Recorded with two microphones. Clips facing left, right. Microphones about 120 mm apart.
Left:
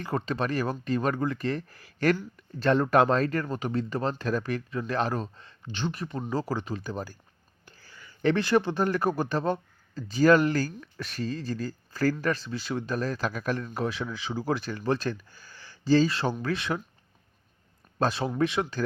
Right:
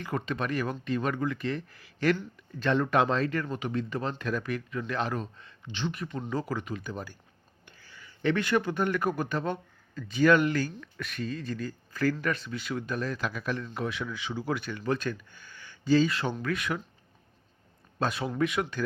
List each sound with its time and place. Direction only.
0.0 s speech: 35° left (ahead or behind)
18.0 s speech: 35° left (ahead or behind)